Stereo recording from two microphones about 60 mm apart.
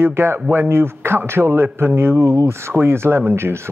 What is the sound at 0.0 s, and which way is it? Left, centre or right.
A man's voice, right.